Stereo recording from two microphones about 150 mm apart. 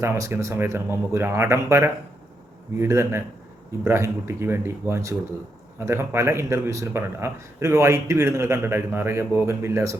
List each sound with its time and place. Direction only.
0.0 s speech: 20° right (ahead or behind)